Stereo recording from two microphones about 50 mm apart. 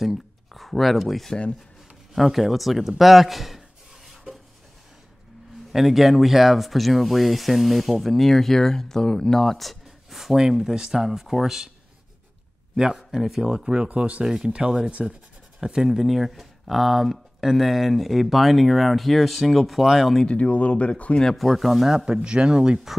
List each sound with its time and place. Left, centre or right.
0.0 s a sound: centre
2.1 s speech: centre
5.7 s speech: centre
12.7 s a man's voice: centre
13.8 s speech: right
14.2 s speech: centre
14.5 s speech: centre
15.0 s speech: centre
20.2 s speech: left
21.4 s speech: centre
22.0 s speech: centre